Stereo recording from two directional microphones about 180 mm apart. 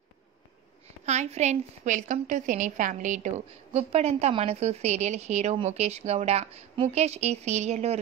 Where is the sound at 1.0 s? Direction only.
40° right (ahead or behind).